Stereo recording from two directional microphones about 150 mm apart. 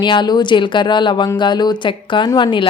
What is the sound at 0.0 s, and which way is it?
A woman's voice, 30° left (ahead or behind).